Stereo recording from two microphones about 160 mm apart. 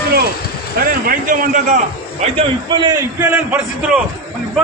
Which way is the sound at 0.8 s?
65° right (ahead or behind).